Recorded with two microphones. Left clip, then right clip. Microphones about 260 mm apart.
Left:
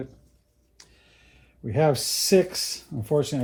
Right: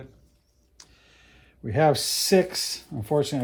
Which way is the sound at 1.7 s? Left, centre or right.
Right.